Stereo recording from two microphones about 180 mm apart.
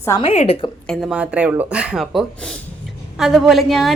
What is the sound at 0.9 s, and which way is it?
A woman's voice, centre (ahead or behind).